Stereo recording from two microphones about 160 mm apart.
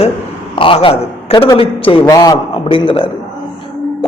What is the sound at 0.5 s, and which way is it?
A man's voice, 35° left (ahead or behind).